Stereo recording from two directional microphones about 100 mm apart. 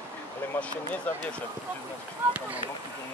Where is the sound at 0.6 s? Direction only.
15° left (ahead or behind).